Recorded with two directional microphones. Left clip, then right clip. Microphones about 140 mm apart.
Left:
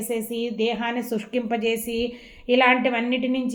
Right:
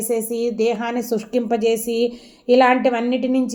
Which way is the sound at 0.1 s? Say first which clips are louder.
Right 6 dB; 45° right (ahead or behind).